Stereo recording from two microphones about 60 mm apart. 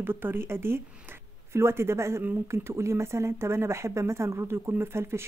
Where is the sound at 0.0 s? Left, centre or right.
Right.